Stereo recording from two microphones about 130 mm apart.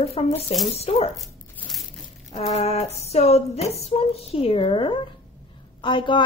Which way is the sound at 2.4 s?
55° left (ahead or behind).